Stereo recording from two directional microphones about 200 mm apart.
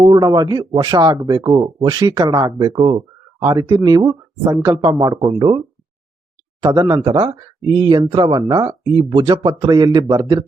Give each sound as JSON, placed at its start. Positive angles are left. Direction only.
{"t": 0.0, "sound": "speech", "side_deg": -20}
{"t": 6.6, "sound": "speech", "side_deg": -20}